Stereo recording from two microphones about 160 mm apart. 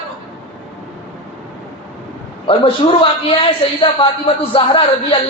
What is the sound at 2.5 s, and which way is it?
A man's voice, 35° left (ahead or behind).